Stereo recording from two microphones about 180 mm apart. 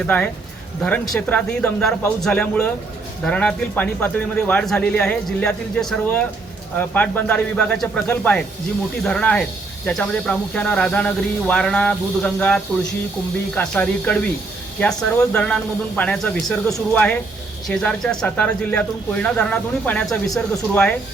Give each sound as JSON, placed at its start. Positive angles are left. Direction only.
{"t": 0.0, "sound": "speech", "side_deg": 10}